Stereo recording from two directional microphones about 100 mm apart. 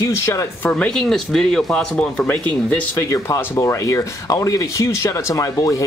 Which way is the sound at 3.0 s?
30° left (ahead or behind).